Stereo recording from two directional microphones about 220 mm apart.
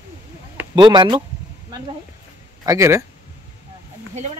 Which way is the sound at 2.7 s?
10° right (ahead or behind).